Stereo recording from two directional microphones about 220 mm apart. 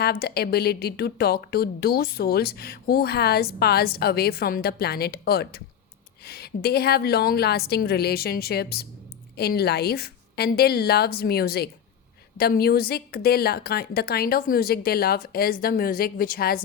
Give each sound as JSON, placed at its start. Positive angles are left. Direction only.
{"t": 0.0, "sound": "a woman's voice", "side_deg": 45}